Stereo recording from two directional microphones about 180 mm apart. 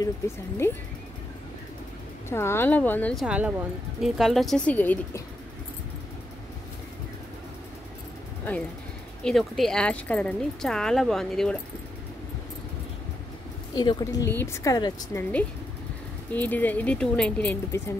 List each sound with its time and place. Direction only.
0.6 s speech: 15° left (ahead or behind)
2.2 s speech: 15° left (ahead or behind)
3.3 s speech: 5° right (ahead or behind); by 5.2 s 10° left (ahead or behind)
9.2 s speech: centre (ahead or behind)
13.7 s a woman's voice: 20° left (ahead or behind)
16.3 s speech: 10° left (ahead or behind)